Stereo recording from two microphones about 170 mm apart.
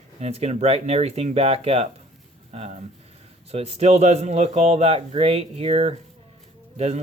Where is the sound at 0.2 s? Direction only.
40° right (ahead or behind).